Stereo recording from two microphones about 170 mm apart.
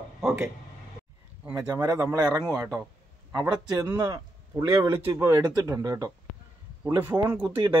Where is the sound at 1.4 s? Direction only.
15° right (ahead or behind).